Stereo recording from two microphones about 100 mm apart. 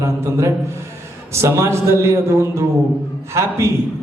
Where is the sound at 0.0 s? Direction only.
30° right (ahead or behind).